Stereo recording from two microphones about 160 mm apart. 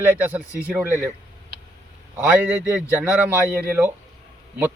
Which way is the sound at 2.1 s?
10° right (ahead or behind).